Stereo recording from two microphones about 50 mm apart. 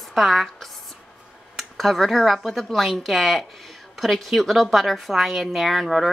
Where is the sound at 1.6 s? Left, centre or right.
Centre.